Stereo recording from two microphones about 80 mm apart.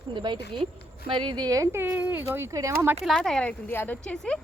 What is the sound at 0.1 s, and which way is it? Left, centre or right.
Speech, right.